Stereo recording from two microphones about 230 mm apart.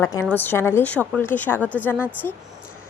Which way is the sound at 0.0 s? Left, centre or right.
Centre.